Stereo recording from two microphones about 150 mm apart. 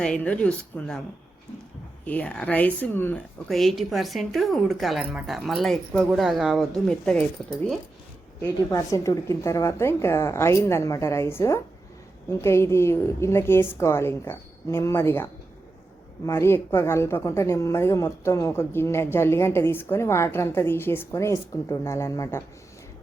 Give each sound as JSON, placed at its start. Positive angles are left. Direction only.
{"t": 0.0, "sound": "speech", "side_deg": 5}
{"t": 2.0, "sound": "speech", "side_deg": 10}
{"t": 3.5, "sound": "a woman's voice", "side_deg": 0}
{"t": 8.7, "sound": "speech", "side_deg": 20}